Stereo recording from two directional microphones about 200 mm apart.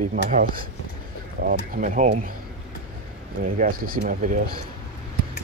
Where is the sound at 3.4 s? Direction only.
45° right (ahead or behind).